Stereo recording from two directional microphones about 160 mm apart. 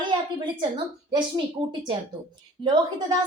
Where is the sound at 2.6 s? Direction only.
25° right (ahead or behind).